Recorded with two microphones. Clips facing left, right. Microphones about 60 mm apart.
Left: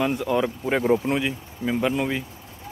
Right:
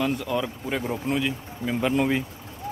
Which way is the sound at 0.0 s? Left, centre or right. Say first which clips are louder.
Left 3 dB; centre.